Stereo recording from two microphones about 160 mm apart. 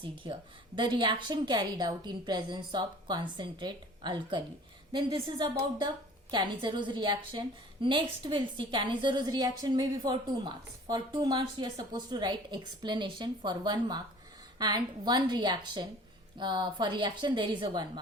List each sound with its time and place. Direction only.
0.0 s a woman's voice: 30° right (ahead or behind)